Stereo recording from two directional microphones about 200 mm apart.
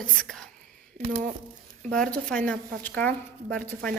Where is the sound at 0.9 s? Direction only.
35° right (ahead or behind).